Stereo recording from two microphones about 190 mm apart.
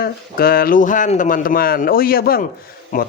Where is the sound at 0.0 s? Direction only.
50° left (ahead or behind).